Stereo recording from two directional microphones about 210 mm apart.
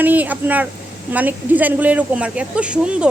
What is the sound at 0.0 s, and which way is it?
Speech, 10° right (ahead or behind).